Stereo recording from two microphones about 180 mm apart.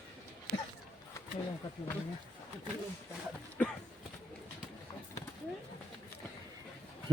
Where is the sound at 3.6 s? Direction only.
10° left (ahead or behind).